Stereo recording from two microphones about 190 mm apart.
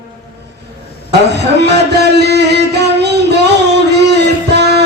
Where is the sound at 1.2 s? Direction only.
60° right (ahead or behind).